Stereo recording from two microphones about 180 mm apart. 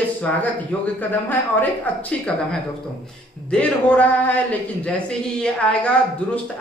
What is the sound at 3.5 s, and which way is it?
Speech, 5° left (ahead or behind).